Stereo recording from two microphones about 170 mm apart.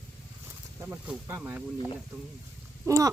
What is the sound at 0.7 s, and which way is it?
Snake, 10° right (ahead or behind).